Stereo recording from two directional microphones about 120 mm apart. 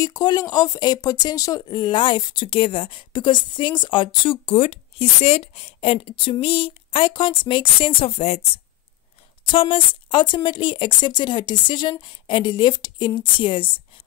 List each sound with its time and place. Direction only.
0.0 s speech: 35° left (ahead or behind); by 8.5 s 60° left (ahead or behind)
9.4 s speech: 50° left (ahead or behind)